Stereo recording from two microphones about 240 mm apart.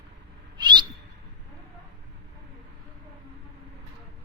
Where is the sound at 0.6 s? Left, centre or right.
Centre.